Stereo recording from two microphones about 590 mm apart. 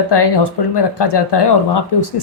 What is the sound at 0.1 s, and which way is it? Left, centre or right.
A woman's voice, left.